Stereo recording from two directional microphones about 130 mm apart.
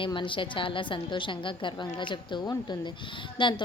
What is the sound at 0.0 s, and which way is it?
A woman's voice, 40° left (ahead or behind).